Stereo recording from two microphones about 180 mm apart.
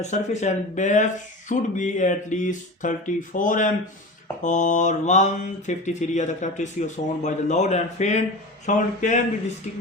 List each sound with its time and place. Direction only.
0.0 s speech: 40° left (ahead or behind)
4.4 s mantra: 45° left (ahead or behind)
8.6 s speech: 40° left (ahead or behind)